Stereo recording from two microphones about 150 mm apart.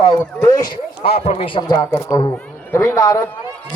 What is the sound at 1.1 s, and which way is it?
A man's voice, 45° left (ahead or behind).